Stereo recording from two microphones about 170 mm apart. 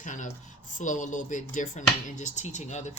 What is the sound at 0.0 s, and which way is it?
Speech, 50° left (ahead or behind).